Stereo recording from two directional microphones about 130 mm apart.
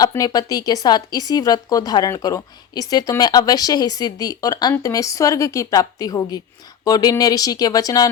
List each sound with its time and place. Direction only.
0.0 s speech: 30° left (ahead or behind)